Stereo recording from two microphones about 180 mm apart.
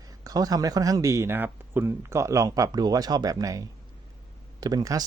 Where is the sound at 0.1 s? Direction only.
20° right (ahead or behind).